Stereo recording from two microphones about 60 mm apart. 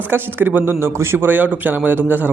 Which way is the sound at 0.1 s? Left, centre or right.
Right.